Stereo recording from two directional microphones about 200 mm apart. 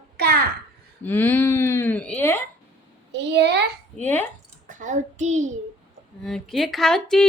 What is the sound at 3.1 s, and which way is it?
Speech, 60° right (ahead or behind).